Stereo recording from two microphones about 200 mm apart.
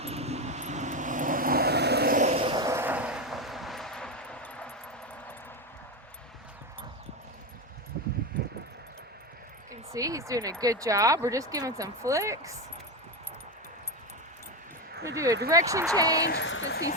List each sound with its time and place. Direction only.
0.0 s vehicle: 30° right (ahead or behind)
2.4 s vehicle: 20° right (ahead or behind); by 4.7 s 5° left (ahead or behind)
9.9 s speech: 15° right (ahead or behind)
15.0 s a sound: 15° right (ahead or behind)
15.4 s speech: 15° right (ahead or behind)
16.2 s speech: 60° left (ahead or behind)